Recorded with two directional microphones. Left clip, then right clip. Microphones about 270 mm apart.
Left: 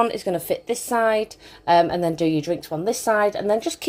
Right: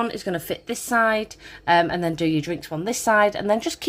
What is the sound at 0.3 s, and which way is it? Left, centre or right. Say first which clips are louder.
A woman's voice: left 4 dB; centre.